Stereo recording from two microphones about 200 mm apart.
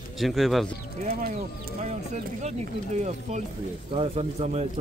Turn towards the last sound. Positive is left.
turn(degrees=-30)  # may be behind; listen again after turning